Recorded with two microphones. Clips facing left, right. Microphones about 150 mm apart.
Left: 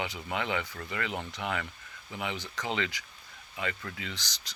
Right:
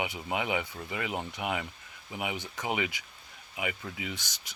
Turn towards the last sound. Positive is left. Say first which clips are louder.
# right 2 dB
turn(degrees=-20)  # may be behind; listen again after turning